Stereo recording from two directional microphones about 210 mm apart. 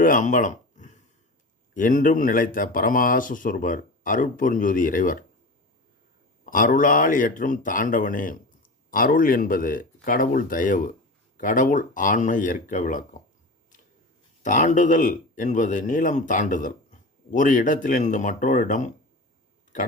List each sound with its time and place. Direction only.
0.0 s a sound: 40° left (ahead or behind)
1.7 s speech: 40° left (ahead or behind)
6.4 s speech: 40° left (ahead or behind)
14.4 s speech: 35° left (ahead or behind)